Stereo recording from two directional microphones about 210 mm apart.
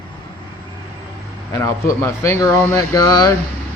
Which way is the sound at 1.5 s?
15° left (ahead or behind).